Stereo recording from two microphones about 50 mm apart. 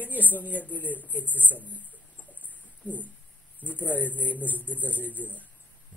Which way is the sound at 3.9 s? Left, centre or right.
Left.